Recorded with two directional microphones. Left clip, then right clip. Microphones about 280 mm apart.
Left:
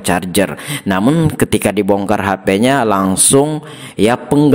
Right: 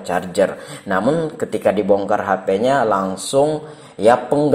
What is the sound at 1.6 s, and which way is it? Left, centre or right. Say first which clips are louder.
Speech: right 3 dB; left.